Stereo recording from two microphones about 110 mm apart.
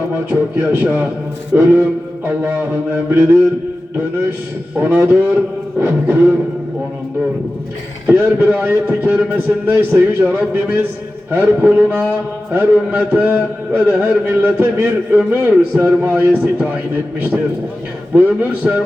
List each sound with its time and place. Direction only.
0.3 s a man's voice: 20° right (ahead or behind)
2.2 s music: 20° right (ahead or behind)
4.8 s a man's voice: 20° right (ahead or behind)
5.8 s music: 20° right (ahead or behind)
8.0 s a man's voice: 15° right (ahead or behind)
10.5 s music: 20° right (ahead or behind)
11.3 s a man's voice: 15° right (ahead or behind)